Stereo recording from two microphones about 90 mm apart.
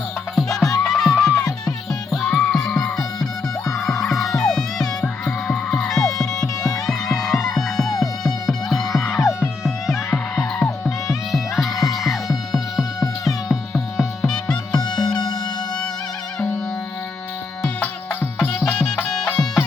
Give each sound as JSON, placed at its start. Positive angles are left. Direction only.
{"t": 0.3, "sound": "music", "side_deg": 5}
{"t": 1.5, "sound": "music", "side_deg": 45}
{"t": 2.2, "sound": "music", "side_deg": 5}
{"t": 15.0, "sound": "music", "side_deg": 50}
{"t": 18.3, "sound": "music", "side_deg": 10}